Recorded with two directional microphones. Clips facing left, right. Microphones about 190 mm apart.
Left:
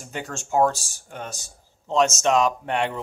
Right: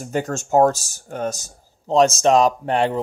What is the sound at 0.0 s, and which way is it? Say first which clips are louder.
Speech: right 9 dB; 40° right (ahead or behind).